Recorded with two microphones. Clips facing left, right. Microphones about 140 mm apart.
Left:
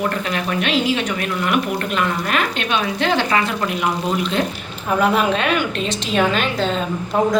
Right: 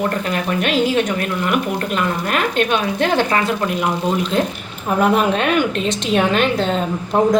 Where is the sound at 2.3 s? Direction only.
50° right (ahead or behind).